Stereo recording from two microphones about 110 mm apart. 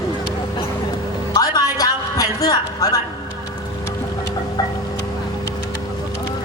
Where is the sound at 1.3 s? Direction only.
35° left (ahead or behind).